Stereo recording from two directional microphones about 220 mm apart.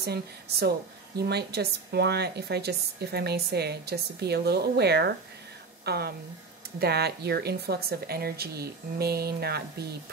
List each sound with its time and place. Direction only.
0.0 s speech: 45° right (ahead or behind)